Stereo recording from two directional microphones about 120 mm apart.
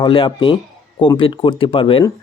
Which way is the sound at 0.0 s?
45° left (ahead or behind).